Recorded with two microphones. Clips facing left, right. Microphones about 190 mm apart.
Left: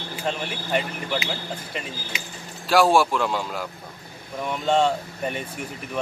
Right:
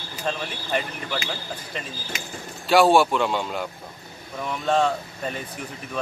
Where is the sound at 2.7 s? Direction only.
Centre (ahead or behind).